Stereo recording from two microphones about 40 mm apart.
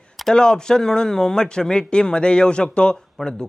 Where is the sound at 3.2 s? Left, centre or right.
Centre.